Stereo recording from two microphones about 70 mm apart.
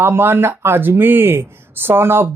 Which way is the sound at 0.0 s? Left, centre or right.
Right.